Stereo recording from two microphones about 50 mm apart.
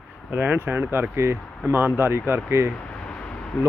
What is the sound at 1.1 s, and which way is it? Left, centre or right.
Speech, right.